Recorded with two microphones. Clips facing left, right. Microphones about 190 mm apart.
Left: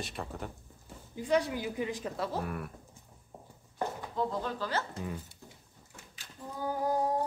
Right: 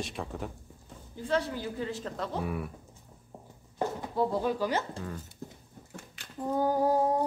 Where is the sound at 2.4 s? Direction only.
Centre (ahead or behind).